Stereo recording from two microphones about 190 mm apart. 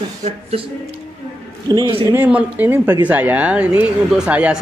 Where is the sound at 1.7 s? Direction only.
25° right (ahead or behind).